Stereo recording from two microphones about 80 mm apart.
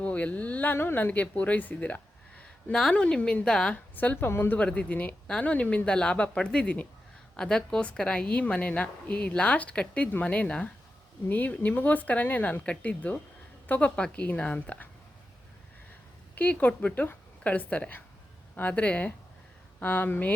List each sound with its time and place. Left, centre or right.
0.0 s speech: centre
3.9 s speech: left
16.4 s speech: left